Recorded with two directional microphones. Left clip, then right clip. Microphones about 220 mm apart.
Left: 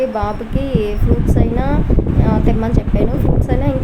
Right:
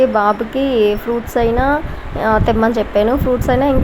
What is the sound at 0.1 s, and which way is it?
A woman's voice, 15° right (ahead or behind).